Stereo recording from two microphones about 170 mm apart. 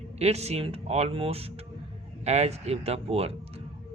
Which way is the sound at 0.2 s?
40° right (ahead or behind).